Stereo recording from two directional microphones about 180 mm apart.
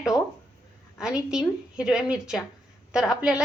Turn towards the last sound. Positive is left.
turn(degrees=-5)  # may be behind; listen again after turning